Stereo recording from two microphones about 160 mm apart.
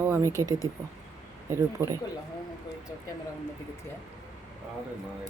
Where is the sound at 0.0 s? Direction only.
15° right (ahead or behind).